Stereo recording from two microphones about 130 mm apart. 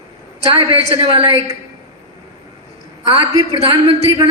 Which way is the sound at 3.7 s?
45° right (ahead or behind).